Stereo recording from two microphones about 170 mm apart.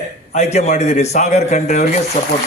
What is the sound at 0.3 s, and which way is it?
A man's voice, 40° left (ahead or behind).